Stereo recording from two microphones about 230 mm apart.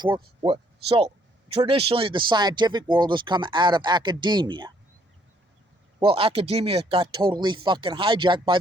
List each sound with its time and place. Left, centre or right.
0.4 s speech: right
6.0 s speech: right